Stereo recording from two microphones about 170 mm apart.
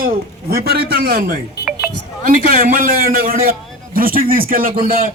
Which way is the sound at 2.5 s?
50° right (ahead or behind).